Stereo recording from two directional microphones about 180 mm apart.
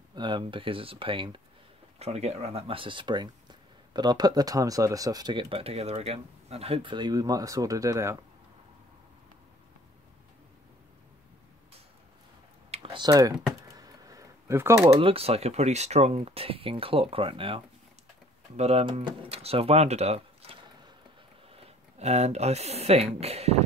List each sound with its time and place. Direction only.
0.1 s speech: 25° right (ahead or behind)
12.7 s computer keyboard: 30° right (ahead or behind)
15.0 s speech: 30° right (ahead or behind)
18.6 s speech: 35° right (ahead or behind)
21.5 s speech: 35° right (ahead or behind)